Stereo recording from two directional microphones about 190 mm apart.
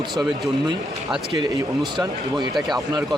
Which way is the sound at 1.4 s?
20° right (ahead or behind).